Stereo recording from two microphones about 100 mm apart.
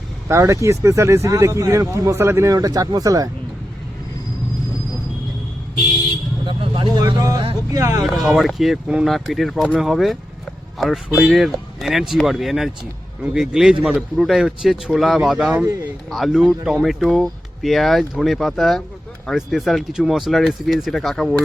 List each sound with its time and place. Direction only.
0.3 s speech: 30° right (ahead or behind)
6.4 s vehicle: 50° right (ahead or behind)
7.2 s speech: 35° right (ahead or behind)
8.0 s speech: centre (ahead or behind)
9.6 s speech: 10° right (ahead or behind)
9.9 s speech: centre (ahead or behind)